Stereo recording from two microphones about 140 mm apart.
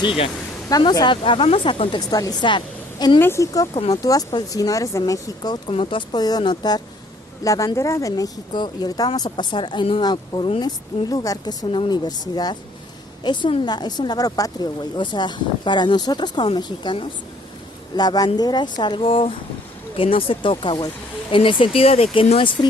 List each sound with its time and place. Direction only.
0.0 s a woman's voice: 40° left (ahead or behind)
3.2 s speech: 20° left (ahead or behind)
5.7 s a woman's voice: 40° left (ahead or behind)